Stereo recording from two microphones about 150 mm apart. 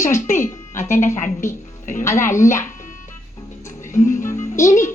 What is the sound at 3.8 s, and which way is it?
Music, 60° left (ahead or behind).